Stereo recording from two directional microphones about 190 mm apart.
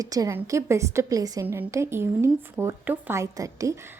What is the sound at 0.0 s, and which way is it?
A woman's voice, 20° right (ahead or behind).